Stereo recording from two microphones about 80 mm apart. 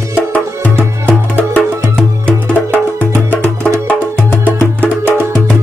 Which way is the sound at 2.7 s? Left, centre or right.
Right.